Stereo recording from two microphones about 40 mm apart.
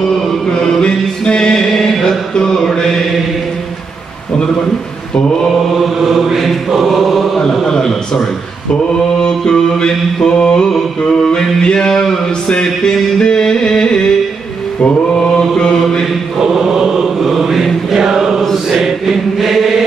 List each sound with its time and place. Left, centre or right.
0.5 s chant: centre
1.7 s chant: centre
5.8 s mantra: centre
6.8 s chant: centre
7.6 s a sound: centre
9.2 s mantra: centre
10.7 s a sound: centre
11.9 s a sound: centre
12.4 s music: centre
15.3 s mantra: centre
16.3 s chant: centre